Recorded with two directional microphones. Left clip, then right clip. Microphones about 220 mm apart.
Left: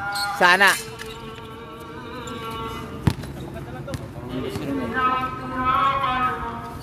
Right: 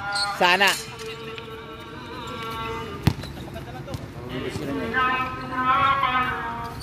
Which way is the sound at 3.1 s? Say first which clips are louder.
Left 1 dB; 40° right (ahead or behind).